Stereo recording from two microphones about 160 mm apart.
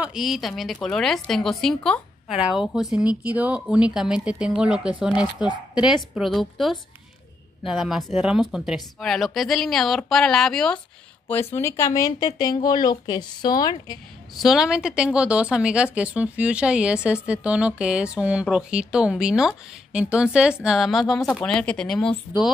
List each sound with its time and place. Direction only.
0.0 s a woman's voice: centre (ahead or behind); by 13.9 s 25° left (ahead or behind)
14.4 s a woman's voice: centre (ahead or behind)